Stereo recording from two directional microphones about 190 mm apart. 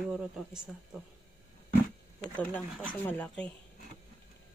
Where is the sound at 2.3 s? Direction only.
5° left (ahead or behind).